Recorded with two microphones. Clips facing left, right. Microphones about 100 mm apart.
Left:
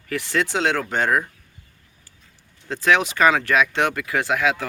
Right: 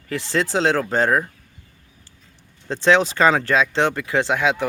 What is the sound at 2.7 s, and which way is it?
Speech, 30° right (ahead or behind).